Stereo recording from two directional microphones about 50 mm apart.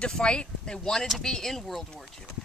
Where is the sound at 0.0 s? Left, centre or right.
Centre.